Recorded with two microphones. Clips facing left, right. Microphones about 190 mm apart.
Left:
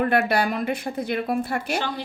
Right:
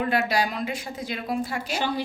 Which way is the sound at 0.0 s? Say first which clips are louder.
Left 3 dB; 55° left (ahead or behind).